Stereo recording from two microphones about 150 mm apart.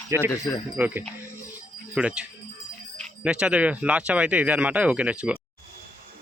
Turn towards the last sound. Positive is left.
turn(degrees=-5)  # may be behind; listen again after turning